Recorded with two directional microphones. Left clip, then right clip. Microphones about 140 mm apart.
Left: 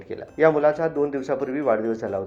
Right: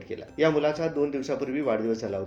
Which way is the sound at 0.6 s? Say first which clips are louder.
Left 5 dB; 5° right (ahead or behind).